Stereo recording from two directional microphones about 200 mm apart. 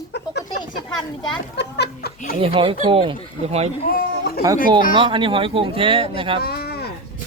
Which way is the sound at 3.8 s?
50° left (ahead or behind).